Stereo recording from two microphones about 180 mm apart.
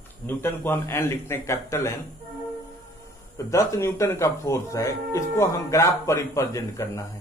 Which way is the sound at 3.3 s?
15° left (ahead or behind).